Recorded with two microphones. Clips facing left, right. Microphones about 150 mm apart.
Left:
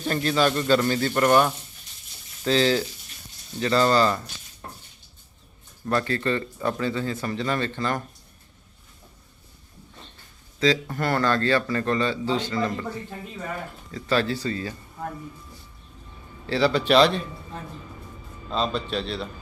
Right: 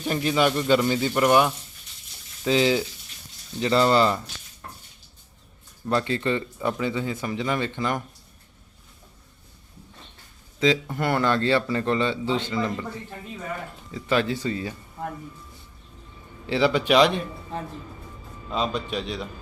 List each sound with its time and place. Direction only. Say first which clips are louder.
0.0 s speech: even; 10° right (ahead or behind)
5.9 s speech: even; 20° right (ahead or behind)
10.6 s a man's voice: even; 20° right (ahead or behind)
13.9 s speech: even; 15° right (ahead or behind)
16.5 s speech: even; 15° right (ahead or behind)
18.5 s speech: left 1 dB; 15° right (ahead or behind)